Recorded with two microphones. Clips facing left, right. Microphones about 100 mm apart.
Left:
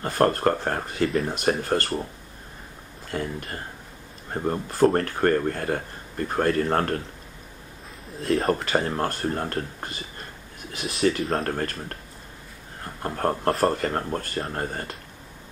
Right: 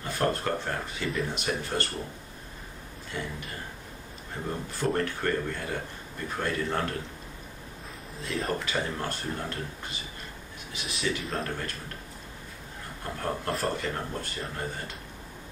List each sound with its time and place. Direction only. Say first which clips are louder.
0.0 s speech: left 7 dB; 50° left (ahead or behind)
3.1 s speech: left 6 dB; 50° left (ahead or behind)
8.3 s speech: left 9 dB; 35° left (ahead or behind)
8.5 s speech: left 7 dB; 50° left (ahead or behind)
13.0 s speech: left 8 dB; 50° left (ahead or behind)